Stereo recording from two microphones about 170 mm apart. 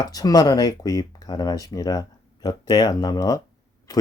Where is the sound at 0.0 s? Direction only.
20° left (ahead or behind).